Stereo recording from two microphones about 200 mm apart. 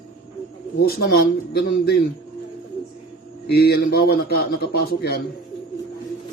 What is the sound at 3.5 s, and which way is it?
A man's voice, 50° left (ahead or behind).